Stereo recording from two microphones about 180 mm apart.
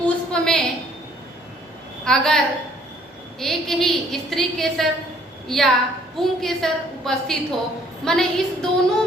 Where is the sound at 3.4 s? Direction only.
Centre (ahead or behind).